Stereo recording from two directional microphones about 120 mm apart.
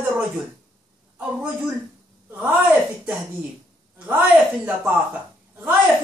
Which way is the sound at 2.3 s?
15° right (ahead or behind).